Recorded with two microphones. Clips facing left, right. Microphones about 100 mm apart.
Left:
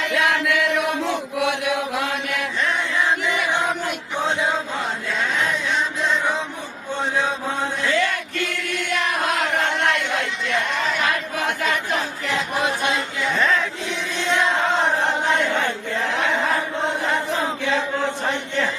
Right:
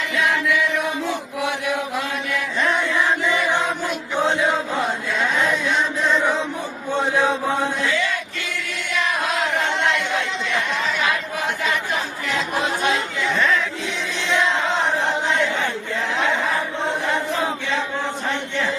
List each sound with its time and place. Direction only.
0.1 s chant: 70° left (ahead or behind)
7.9 s choir: 50° left (ahead or behind)
10.8 s a sound: 55° left (ahead or behind)
14.2 s chant: 50° left (ahead or behind)